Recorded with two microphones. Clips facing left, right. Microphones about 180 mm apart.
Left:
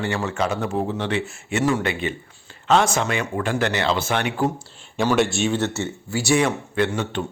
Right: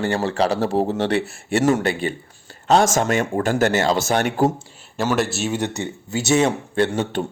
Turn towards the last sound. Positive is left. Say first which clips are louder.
# right 2 dB
turn(degrees=-35)  # may be behind; listen again after turning